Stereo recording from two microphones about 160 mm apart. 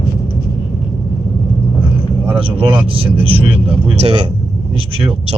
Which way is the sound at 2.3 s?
35° right (ahead or behind).